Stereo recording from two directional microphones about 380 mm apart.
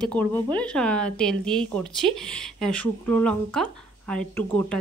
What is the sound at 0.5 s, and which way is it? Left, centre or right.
Speech, centre.